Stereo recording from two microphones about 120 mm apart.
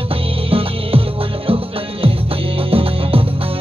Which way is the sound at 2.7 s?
50° right (ahead or behind).